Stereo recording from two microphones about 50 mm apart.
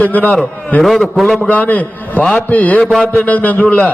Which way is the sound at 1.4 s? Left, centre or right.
Left.